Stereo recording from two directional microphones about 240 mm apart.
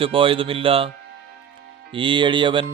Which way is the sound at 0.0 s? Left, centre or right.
Right.